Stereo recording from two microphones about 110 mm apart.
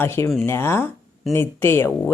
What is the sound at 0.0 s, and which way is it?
Speech, 20° left (ahead or behind).